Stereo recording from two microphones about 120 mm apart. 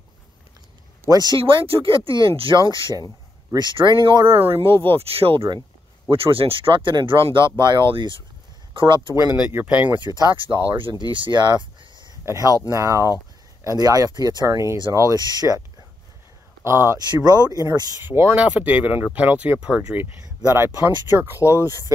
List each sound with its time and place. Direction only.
1.0 s speech: 35° right (ahead or behind)
1.4 s speech: 50° right (ahead or behind)
4.3 s speech: 55° right (ahead or behind)
9.5 s speech: 15° right (ahead or behind)
10.0 s speech: 35° right (ahead or behind)
12.3 s speech: 25° right (ahead or behind)
16.6 s speech: 20° right (ahead or behind)
17.2 s speech: 35° right (ahead or behind)
18.0 s speech: 15° right (ahead or behind)